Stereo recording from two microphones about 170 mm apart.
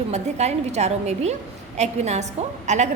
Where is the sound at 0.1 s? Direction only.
40° right (ahead or behind).